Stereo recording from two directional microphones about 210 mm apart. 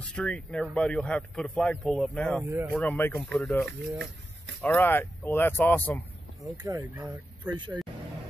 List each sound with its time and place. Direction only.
0.1 s speech: 5° left (ahead or behind)
2.4 s speech: 10° right (ahead or behind)
2.7 s speech: 10° left (ahead or behind)
6.6 s speech: 20° right (ahead or behind)